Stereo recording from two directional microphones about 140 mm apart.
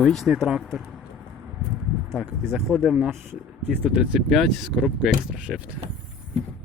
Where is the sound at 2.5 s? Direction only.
5° left (ahead or behind).